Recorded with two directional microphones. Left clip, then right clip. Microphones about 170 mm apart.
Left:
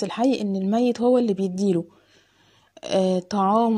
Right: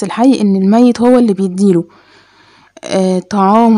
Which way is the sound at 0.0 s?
15° right (ahead or behind).